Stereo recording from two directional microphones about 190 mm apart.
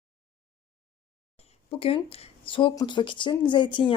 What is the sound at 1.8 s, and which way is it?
Speech, 30° left (ahead or behind).